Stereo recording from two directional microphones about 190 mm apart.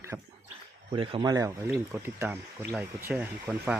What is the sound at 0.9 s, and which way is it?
Speech, 25° right (ahead or behind).